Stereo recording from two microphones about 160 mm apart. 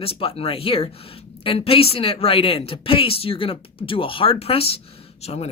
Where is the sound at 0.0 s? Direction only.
35° left (ahead or behind).